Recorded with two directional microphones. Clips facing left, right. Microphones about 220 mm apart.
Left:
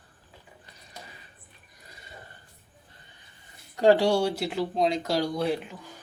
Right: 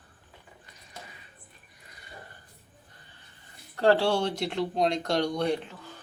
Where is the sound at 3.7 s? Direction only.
15° left (ahead or behind).